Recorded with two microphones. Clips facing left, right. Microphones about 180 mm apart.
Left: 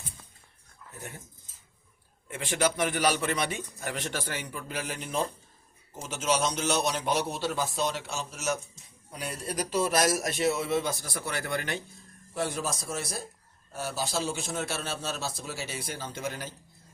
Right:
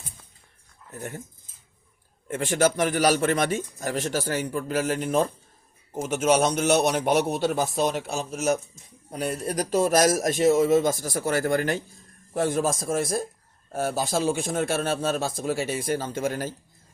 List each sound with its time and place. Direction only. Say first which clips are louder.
2.2 s a man's voice: right 6 dB; 45° right (ahead or behind)